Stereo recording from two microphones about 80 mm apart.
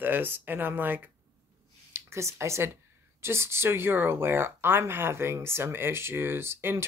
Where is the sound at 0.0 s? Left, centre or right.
Right.